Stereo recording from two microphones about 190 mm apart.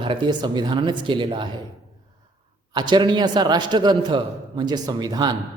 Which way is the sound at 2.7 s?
25° right (ahead or behind).